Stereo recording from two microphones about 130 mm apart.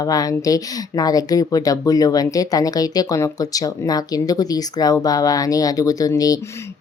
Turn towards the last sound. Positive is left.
turn(degrees=30)  # may be behind; listen again after turning